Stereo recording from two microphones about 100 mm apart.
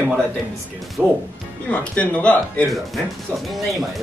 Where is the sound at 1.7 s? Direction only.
15° left (ahead or behind).